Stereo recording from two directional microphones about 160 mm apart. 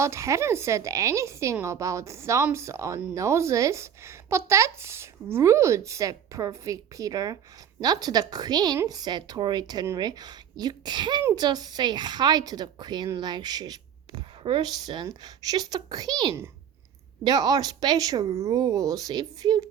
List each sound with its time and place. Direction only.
0.0 s a woman's voice: 20° right (ahead or behind)